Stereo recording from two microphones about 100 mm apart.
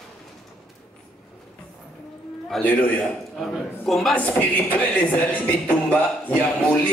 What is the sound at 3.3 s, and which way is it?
Speech, centre (ahead or behind).